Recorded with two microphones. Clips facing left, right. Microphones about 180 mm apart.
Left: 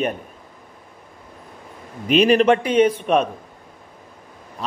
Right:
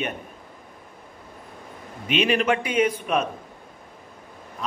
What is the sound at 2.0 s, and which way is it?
Speech, 40° left (ahead or behind).